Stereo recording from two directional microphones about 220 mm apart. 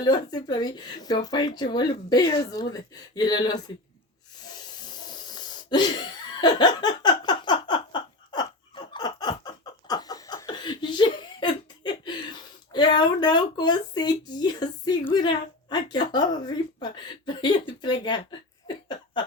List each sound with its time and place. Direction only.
0.0 s speech: 20° left (ahead or behind)
5.3 s laughter: 20° left (ahead or behind)
12.7 s speech: 20° left (ahead or behind)
18.7 s a sound: 20° left (ahead or behind)